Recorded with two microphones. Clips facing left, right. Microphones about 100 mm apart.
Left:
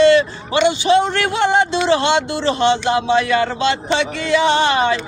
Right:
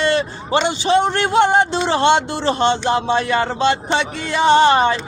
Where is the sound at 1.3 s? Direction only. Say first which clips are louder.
Right 3 dB; 45° right (ahead or behind).